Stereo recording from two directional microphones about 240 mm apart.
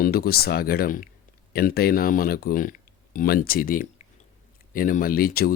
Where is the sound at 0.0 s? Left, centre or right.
Left.